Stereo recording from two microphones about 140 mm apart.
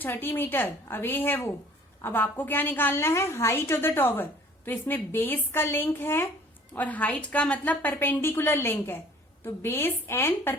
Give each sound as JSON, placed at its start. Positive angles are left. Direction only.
{"t": 0.0, "sound": "a woman's voice", "side_deg": 15}